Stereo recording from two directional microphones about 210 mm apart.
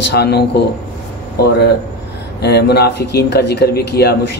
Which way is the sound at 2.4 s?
50° left (ahead or behind).